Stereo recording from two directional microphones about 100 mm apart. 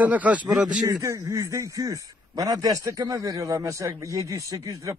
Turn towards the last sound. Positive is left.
turn(degrees=-35)  # may be behind; listen again after turning